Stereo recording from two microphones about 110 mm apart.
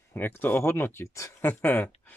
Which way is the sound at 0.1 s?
15° left (ahead or behind).